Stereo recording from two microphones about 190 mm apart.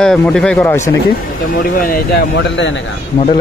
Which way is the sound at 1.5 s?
50° left (ahead or behind).